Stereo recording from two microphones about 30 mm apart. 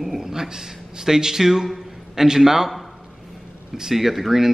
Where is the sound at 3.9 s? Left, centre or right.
Centre.